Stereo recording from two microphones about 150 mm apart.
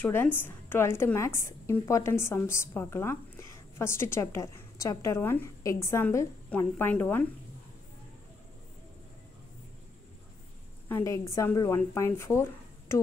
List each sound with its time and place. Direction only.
0.0 s a woman's voice: 15° left (ahead or behind)
10.9 s a woman's voice: 20° left (ahead or behind)